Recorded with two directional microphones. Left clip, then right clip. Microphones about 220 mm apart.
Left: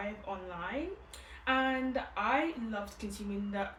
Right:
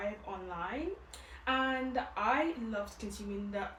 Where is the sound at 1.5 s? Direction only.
15° left (ahead or behind).